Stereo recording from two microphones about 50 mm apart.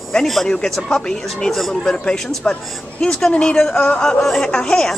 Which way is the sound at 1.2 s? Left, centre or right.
Centre.